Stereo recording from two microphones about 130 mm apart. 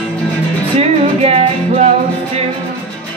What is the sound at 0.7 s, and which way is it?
Music, 50° right (ahead or behind).